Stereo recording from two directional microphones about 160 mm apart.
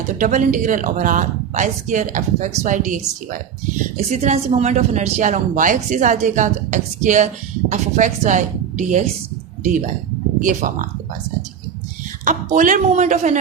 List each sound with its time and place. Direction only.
0.2 s a woman's voice: 55° right (ahead or behind)
12.2 s a woman's voice: 55° right (ahead or behind)